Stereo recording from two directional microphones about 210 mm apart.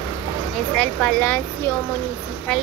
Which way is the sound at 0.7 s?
5° left (ahead or behind).